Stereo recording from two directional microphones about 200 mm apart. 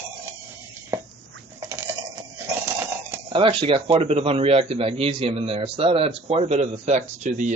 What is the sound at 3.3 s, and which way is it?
A man's voice, 25° right (ahead or behind).